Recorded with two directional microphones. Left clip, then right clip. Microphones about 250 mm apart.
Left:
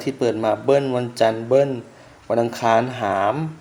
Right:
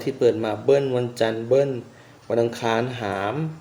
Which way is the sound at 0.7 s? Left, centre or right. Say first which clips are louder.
Right 2 dB; centre.